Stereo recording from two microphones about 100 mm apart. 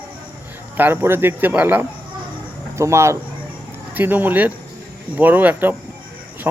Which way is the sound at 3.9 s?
20° right (ahead or behind).